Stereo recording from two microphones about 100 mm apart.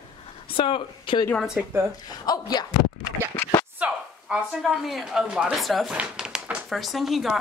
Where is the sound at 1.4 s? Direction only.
5° right (ahead or behind).